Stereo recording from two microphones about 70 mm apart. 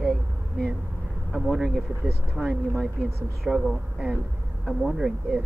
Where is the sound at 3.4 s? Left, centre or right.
Centre.